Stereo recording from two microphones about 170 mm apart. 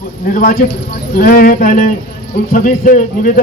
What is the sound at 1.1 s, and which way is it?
Speech, 60° left (ahead or behind).